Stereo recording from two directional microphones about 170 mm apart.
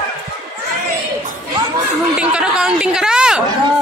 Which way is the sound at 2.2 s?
5° right (ahead or behind).